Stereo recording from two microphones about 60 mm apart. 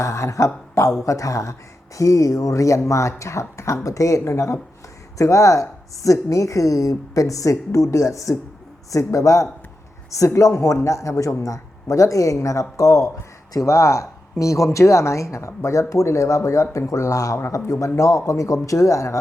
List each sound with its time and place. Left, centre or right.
0.0 s a woman's voice: left